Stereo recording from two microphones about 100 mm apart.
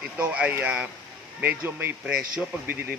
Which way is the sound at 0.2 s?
15° right (ahead or behind).